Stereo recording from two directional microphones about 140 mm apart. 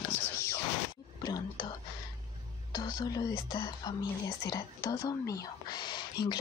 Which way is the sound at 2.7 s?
25° left (ahead or behind).